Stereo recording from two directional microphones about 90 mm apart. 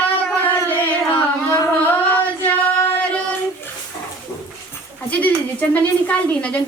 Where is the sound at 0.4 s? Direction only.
20° left (ahead or behind).